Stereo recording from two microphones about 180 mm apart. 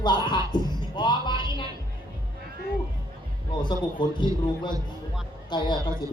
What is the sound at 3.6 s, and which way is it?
Speech, 25° left (ahead or behind).